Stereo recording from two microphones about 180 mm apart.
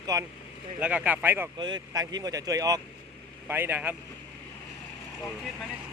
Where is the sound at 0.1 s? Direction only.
20° right (ahead or behind).